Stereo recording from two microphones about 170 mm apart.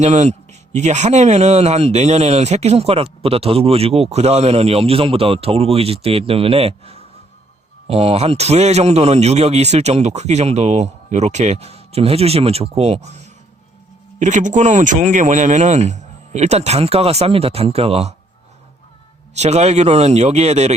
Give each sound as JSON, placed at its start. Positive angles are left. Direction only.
{"t": 0.0, "sound": "speech", "side_deg": -40}
{"t": 19.3, "sound": "speech", "side_deg": -40}